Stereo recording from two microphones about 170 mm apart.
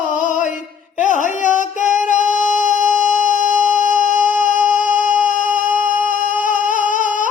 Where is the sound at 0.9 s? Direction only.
45° left (ahead or behind).